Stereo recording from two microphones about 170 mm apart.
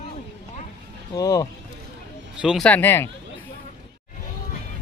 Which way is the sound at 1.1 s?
20° left (ahead or behind).